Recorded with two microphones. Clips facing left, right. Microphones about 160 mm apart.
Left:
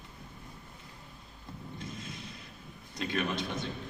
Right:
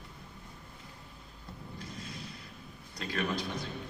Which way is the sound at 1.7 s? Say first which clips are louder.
Left 1 dB; 25° left (ahead or behind).